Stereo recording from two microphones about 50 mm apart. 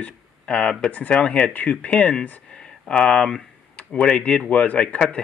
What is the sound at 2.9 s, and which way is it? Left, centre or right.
Speech, centre.